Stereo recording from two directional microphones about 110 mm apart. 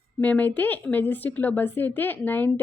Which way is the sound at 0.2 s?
15° left (ahead or behind).